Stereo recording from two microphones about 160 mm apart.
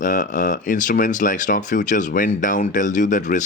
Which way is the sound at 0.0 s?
55° left (ahead or behind).